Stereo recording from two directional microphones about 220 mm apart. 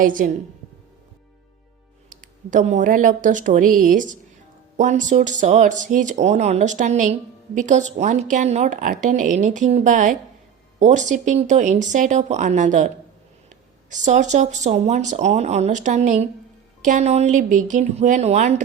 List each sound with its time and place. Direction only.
0.0 s speech: 40° right (ahead or behind)
2.0 s speech: 35° right (ahead or behind)
13.9 s speech: 35° right (ahead or behind)